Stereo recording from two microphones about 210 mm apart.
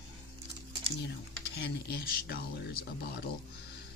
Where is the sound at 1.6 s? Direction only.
50° left (ahead or behind).